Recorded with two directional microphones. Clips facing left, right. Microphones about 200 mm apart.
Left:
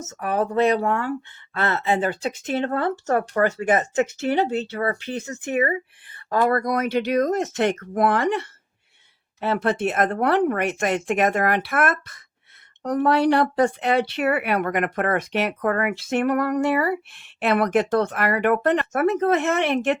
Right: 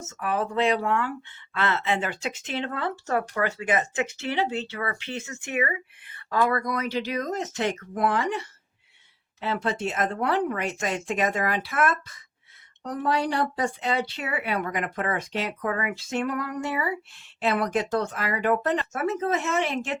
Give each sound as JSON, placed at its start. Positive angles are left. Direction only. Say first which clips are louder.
{"t": 0.0, "sound": "speech", "louder": "left 4 dB", "side_deg": 40}